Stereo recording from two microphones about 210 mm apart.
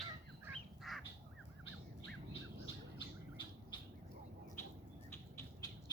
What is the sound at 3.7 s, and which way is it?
Bird, 20° left (ahead or behind).